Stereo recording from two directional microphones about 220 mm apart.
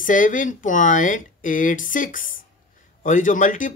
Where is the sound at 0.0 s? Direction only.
35° left (ahead or behind).